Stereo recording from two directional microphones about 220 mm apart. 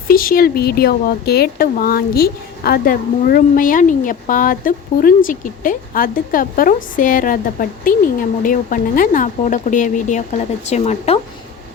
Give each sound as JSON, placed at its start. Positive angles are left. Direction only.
{"t": 0.1, "sound": "speech", "side_deg": 40}